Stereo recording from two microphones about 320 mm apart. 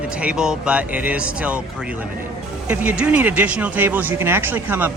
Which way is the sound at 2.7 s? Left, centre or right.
Centre.